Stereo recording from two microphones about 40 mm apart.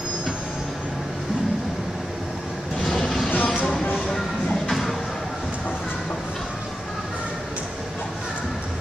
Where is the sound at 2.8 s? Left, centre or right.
Centre.